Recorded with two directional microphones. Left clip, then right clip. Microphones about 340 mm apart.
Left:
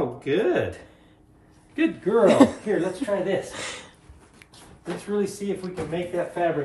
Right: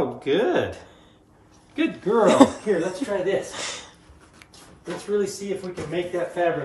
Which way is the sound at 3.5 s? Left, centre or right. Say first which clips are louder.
Right 2 dB; centre.